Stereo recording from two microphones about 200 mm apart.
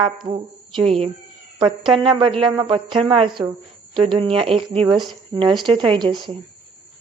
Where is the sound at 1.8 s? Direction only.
25° right (ahead or behind).